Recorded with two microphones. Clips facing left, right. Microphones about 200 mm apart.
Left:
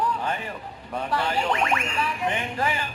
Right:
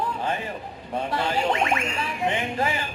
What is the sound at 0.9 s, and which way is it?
Speech, 20° right (ahead or behind).